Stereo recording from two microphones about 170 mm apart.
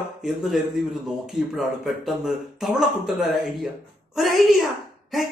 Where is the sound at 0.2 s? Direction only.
Centre (ahead or behind).